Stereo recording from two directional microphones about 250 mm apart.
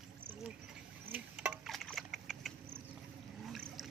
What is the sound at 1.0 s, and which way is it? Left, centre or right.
Wood, centre.